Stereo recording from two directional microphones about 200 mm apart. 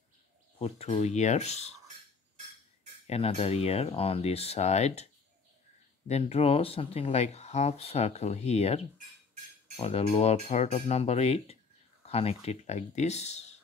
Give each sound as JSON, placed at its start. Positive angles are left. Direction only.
{"t": 0.6, "sound": "speech", "side_deg": 35}
{"t": 3.1, "sound": "speech", "side_deg": 30}